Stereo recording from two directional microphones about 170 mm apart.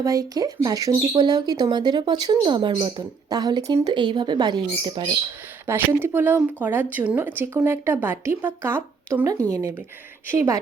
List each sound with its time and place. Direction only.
0.0 s speech: 20° right (ahead or behind)
5.6 s speech: 15° right (ahead or behind)